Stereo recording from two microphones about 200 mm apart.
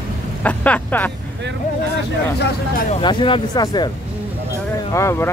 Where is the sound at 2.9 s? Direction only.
25° left (ahead or behind).